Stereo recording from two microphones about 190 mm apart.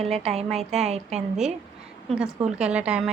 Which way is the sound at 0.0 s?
35° right (ahead or behind).